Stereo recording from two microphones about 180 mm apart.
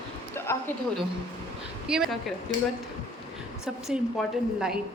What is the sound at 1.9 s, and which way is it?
Speech, 5° right (ahead or behind).